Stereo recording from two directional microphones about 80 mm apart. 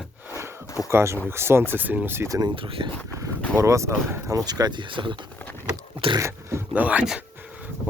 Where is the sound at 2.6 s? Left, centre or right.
Right.